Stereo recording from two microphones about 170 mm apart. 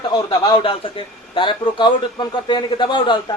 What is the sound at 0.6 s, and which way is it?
Speech, 30° left (ahead or behind).